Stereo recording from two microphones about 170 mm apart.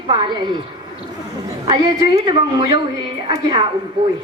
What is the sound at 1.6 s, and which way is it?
A woman's voice, 25° right (ahead or behind).